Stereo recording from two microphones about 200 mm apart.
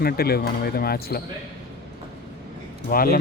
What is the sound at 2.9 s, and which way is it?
Speech, 45° left (ahead or behind).